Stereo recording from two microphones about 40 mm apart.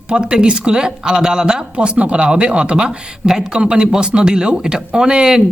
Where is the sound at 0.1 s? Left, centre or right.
Right.